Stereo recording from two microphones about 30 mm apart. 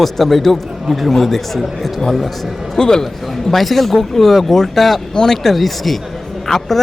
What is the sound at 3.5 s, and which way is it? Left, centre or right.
Speech, centre.